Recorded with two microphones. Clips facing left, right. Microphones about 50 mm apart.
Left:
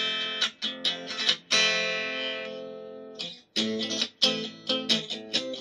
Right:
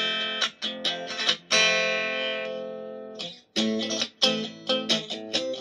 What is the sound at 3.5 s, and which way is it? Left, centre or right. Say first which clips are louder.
Music: right 3 dB; centre.